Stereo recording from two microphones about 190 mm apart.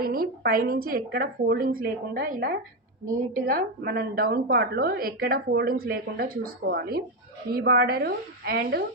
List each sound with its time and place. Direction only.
0.0 s a woman's voice: 50° right (ahead or behind)